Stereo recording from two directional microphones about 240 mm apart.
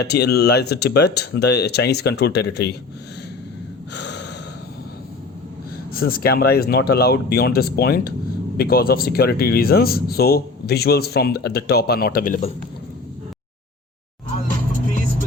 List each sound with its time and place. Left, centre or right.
0.0 s speech: left
3.9 s breathing: left
5.9 s speech: left